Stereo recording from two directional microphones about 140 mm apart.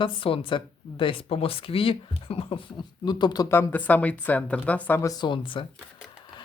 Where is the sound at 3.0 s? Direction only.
30° left (ahead or behind).